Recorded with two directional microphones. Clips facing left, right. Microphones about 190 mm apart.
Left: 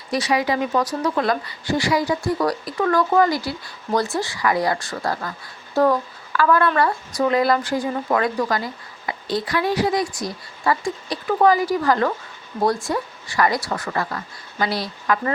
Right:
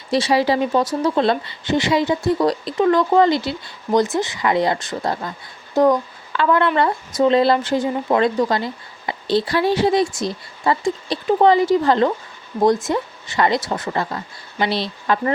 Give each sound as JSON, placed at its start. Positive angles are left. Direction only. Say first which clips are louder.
{"t": 0.1, "sound": "speech", "louder": "right 4 dB", "side_deg": -30}